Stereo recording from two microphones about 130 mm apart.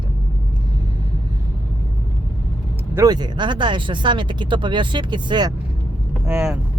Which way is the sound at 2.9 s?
30° right (ahead or behind).